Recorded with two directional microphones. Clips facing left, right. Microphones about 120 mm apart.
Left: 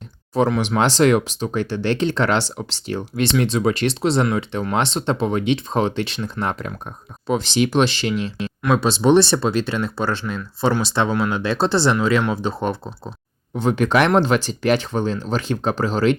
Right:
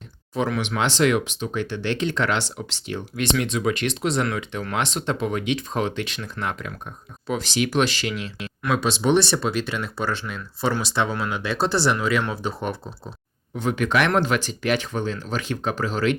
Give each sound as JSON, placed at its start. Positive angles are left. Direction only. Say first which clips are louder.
{"t": 0.3, "sound": "speech", "louder": "left 6 dB", "side_deg": 35}